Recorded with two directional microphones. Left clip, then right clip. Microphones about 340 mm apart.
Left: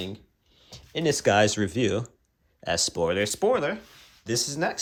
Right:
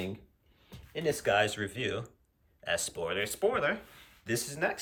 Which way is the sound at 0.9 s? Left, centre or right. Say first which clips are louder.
Left 6 dB; centre.